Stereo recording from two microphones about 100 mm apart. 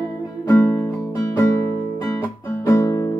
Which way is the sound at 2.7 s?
30° left (ahead or behind).